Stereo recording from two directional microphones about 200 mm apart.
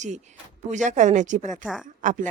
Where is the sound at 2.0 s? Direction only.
40° right (ahead or behind).